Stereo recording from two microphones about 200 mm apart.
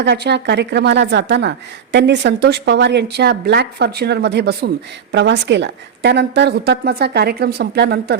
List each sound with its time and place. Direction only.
0.0 s a woman's voice: 60° right (ahead or behind)